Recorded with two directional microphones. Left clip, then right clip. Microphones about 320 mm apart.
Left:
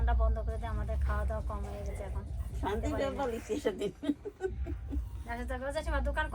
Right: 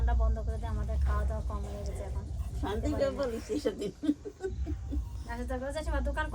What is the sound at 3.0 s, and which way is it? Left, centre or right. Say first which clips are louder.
Speech: right 2 dB; left.